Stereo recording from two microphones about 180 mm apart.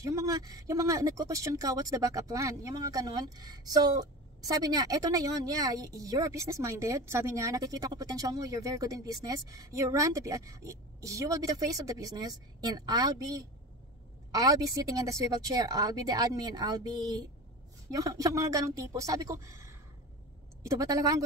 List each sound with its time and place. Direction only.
0.0 s speech: 15° right (ahead or behind)
20.8 s speech: 20° right (ahead or behind)